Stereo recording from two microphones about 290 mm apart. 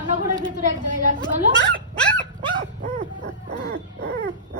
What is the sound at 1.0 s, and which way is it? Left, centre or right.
Speech, right.